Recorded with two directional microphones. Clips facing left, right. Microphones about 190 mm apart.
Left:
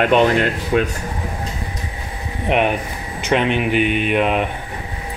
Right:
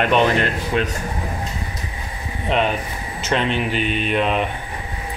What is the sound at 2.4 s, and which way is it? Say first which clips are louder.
Speech: left 2 dB; 15° left (ahead or behind).